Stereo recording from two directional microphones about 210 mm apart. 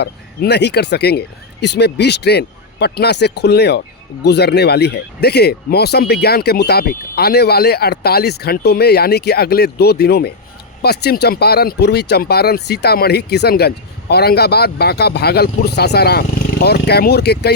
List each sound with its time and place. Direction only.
0.0 s speech: 55° left (ahead or behind)